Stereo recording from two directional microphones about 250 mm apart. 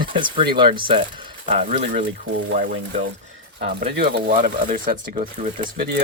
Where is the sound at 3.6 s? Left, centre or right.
Right.